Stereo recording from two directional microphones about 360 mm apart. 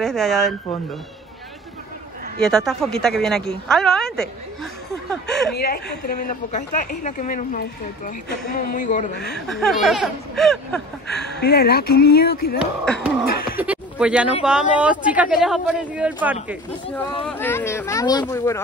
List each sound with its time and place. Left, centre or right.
0.0 s speech: centre
2.4 s speech: centre
5.5 s a woman's voice: left
9.5 s speech: centre
11.2 s a woman's voice: left
12.8 s speech: centre
13.6 s a sound: centre
14.4 s a child's voice: centre